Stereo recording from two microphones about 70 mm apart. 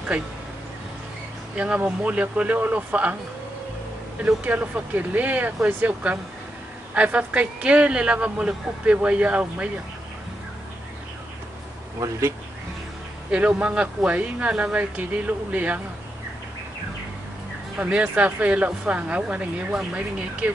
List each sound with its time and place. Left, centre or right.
1.5 s speech: centre
4.5 s a man's voice: right
12.0 s speech: right
13.3 s speech: centre
17.7 s speech: centre